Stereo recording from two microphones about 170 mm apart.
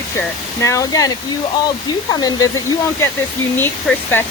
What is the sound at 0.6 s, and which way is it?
Speech, 20° left (ahead or behind).